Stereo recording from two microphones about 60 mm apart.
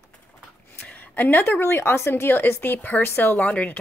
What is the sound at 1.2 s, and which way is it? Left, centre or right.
Speech, left.